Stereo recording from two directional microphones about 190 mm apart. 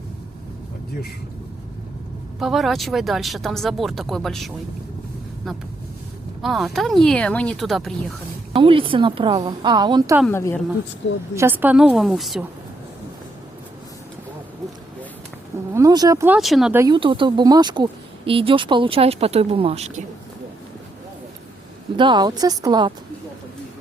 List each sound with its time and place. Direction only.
2.4 s speech: centre (ahead or behind)
6.4 s speech: centre (ahead or behind)
8.5 s a woman's voice: 30° right (ahead or behind)
10.2 s a woman's voice: 10° left (ahead or behind)
11.3 s speech: 10° right (ahead or behind)
15.7 s speech: 20° right (ahead or behind); by 16.7 s centre (ahead or behind)
16.7 s a woman's voice: 20° right (ahead or behind)
21.9 s a woman's voice: 25° right (ahead or behind)